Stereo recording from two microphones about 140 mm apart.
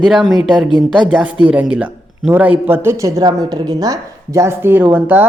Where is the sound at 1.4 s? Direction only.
10° right (ahead or behind).